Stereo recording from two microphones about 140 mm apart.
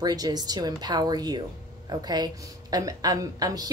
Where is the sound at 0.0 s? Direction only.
30° right (ahead or behind).